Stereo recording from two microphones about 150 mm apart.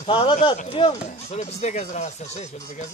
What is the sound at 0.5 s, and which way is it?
Speech, 50° left (ahead or behind).